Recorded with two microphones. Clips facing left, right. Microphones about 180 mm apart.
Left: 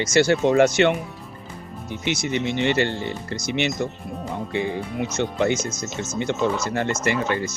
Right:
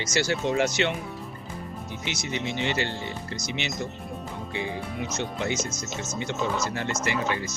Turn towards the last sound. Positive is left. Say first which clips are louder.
# left 5 dB
turn(degrees=0)  # may be behind; listen again after turning